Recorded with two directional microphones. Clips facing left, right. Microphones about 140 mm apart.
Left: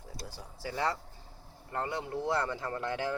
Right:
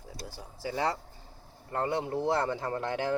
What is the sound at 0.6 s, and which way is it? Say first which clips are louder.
Speech: right 2 dB; 25° right (ahead or behind).